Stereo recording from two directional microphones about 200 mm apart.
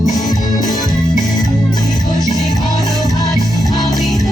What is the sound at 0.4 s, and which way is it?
Music, 20° left (ahead or behind).